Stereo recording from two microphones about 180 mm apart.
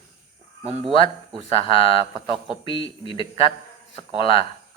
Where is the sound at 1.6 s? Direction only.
30° left (ahead or behind).